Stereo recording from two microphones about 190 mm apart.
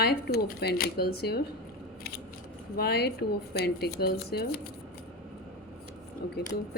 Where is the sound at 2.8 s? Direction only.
55° left (ahead or behind).